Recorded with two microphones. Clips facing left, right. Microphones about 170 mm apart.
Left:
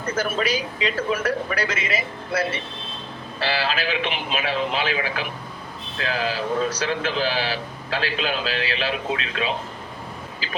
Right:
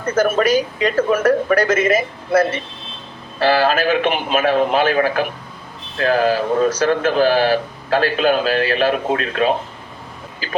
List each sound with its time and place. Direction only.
0.0 s a man's voice: 45° right (ahead or behind)